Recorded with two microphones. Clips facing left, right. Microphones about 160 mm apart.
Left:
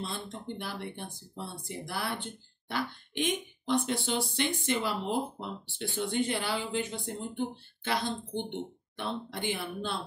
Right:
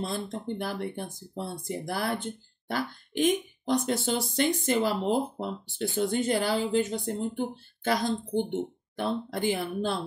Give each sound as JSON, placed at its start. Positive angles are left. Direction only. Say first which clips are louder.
{"t": 0.0, "sound": "speech", "louder": "right 6 dB", "side_deg": -45}